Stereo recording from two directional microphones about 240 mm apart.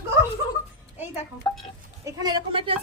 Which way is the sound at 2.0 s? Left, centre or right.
Centre.